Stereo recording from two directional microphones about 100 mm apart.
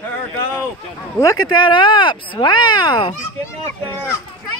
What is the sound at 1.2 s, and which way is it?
Speech, 40° left (ahead or behind).